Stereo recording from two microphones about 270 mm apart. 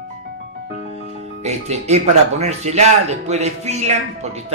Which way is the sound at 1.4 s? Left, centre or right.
Right.